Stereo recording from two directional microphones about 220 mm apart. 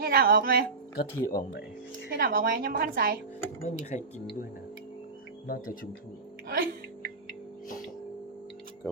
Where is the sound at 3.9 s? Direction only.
30° left (ahead or behind).